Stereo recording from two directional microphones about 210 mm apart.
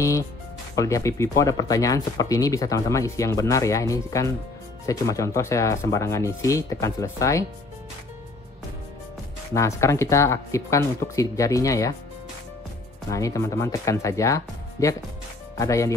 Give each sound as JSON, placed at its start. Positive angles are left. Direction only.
{"t": 0.7, "sound": "speech", "side_deg": 15}
{"t": 9.5, "sound": "speech", "side_deg": 15}
{"t": 13.1, "sound": "speech", "side_deg": 15}